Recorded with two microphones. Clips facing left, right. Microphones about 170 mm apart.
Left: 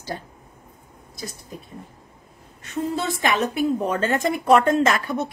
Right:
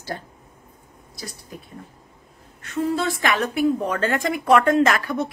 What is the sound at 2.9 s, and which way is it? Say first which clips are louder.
Speech: even; 20° left (ahead or behind).